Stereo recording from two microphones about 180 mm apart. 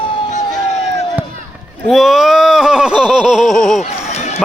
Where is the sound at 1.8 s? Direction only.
Centre (ahead or behind).